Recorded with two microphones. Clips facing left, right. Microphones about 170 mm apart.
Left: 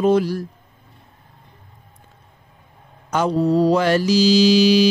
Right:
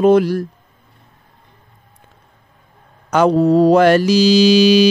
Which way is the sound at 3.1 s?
65° right (ahead or behind).